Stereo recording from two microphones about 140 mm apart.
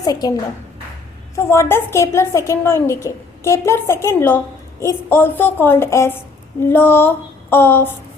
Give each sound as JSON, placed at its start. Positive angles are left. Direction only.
{"t": 0.0, "sound": "a woman's voice", "side_deg": 25}
{"t": 1.4, "sound": "a woman's voice", "side_deg": 20}